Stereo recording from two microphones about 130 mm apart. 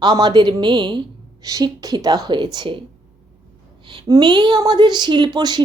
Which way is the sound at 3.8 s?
40° right (ahead or behind).